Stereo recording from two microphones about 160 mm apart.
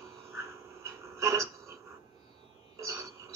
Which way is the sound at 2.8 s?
20° right (ahead or behind).